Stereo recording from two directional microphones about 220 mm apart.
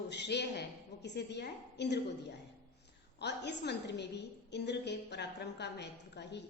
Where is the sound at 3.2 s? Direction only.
50° left (ahead or behind).